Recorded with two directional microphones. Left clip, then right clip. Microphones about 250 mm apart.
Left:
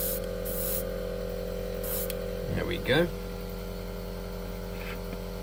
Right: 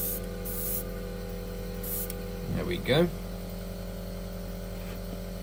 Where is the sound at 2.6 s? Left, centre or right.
Left.